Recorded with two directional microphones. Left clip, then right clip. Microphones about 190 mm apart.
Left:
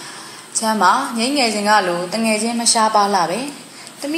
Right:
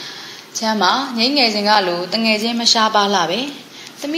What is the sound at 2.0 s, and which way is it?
Speech, 40° right (ahead or behind).